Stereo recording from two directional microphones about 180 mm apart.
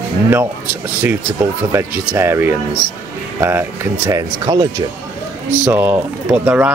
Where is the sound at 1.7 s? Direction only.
10° right (ahead or behind).